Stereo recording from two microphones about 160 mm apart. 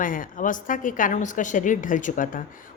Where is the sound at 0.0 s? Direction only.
60° left (ahead or behind).